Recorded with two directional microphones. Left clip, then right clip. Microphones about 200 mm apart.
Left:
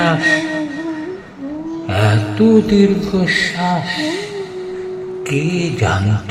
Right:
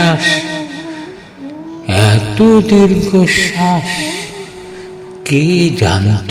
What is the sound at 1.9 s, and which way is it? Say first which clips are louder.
Speech: right 4 dB; 45° right (ahead or behind).